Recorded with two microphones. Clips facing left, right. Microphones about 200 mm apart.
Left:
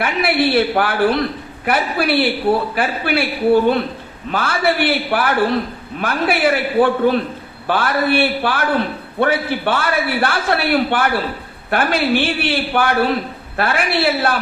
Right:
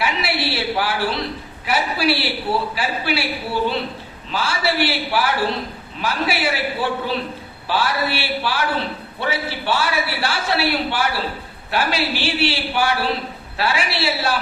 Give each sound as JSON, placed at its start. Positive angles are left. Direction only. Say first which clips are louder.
{"t": 0.0, "sound": "a woman's voice", "louder": "left 6 dB", "side_deg": 55}